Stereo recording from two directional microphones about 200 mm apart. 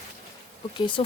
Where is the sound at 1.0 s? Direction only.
25° left (ahead or behind).